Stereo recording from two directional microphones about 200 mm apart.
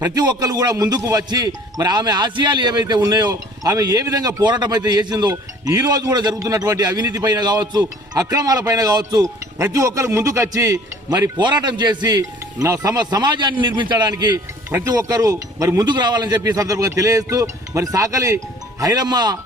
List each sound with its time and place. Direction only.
0.0 s a man's voice: 20° right (ahead or behind)